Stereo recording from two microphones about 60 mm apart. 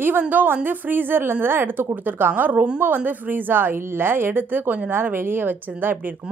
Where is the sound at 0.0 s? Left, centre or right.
Right.